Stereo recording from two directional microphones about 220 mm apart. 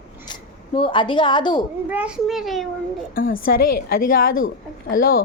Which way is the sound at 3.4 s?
40° left (ahead or behind).